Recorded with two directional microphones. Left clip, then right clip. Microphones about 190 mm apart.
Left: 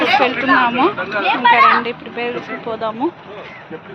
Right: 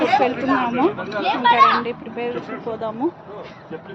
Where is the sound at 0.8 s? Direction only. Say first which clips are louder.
Left 4 dB; 30° left (ahead or behind).